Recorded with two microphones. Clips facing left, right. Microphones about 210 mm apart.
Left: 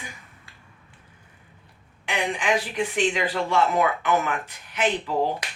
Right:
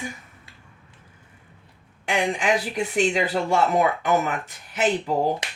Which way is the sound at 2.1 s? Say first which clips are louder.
Right 2 dB; 45° right (ahead or behind).